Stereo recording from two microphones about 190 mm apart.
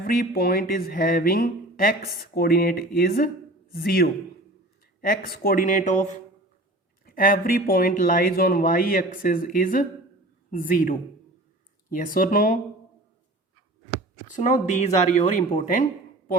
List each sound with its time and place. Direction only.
0.0 s a man's voice: 50° left (ahead or behind)
14.3 s speech: 40° left (ahead or behind)